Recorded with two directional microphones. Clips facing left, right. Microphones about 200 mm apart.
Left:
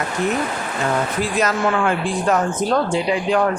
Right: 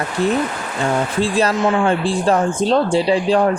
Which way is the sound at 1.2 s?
30° right (ahead or behind).